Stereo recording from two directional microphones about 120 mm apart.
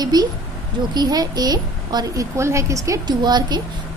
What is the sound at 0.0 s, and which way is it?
A woman's voice, 35° right (ahead or behind).